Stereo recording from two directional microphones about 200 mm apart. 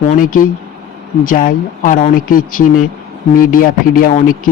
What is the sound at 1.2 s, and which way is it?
Speech, 45° left (ahead or behind).